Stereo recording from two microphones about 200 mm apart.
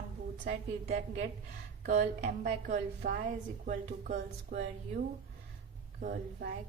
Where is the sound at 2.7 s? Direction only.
55° right (ahead or behind).